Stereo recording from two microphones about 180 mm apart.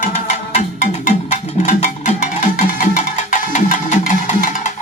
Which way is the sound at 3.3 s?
45° left (ahead or behind).